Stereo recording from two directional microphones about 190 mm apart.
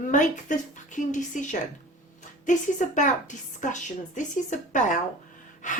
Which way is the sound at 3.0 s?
40° left (ahead or behind).